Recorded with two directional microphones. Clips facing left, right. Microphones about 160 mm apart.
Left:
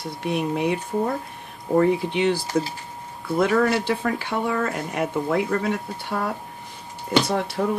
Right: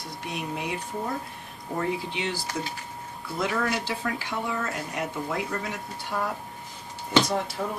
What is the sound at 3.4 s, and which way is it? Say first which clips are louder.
Speech: left 8 dB; 55° left (ahead or behind).